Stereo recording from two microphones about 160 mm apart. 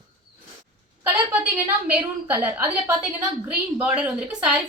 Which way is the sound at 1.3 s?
10° right (ahead or behind).